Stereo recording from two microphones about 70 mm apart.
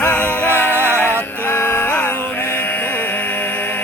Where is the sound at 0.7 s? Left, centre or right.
Right.